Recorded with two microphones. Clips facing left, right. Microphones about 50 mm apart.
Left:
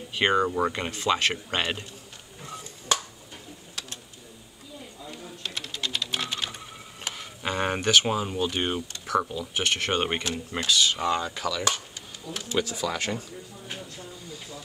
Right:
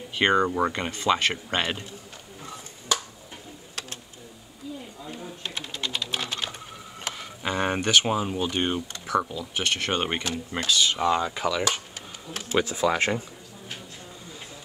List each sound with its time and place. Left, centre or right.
0.1 s speech: centre
0.5 s speech: centre
5.1 s typing: right
7.1 s speech: centre
9.0 s a sound: centre
9.6 s speech: centre; by 13.2 s right